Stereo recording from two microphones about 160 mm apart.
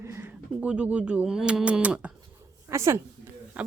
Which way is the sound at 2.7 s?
15° right (ahead or behind).